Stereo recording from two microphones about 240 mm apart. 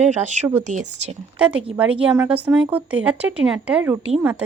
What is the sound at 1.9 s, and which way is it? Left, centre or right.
Speech, right.